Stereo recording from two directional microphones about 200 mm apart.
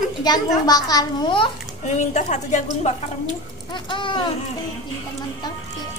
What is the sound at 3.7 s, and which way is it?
Speech, 25° left (ahead or behind).